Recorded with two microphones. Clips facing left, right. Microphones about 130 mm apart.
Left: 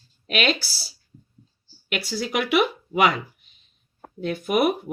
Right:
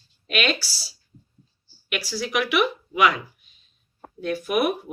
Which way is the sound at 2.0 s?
25° left (ahead or behind).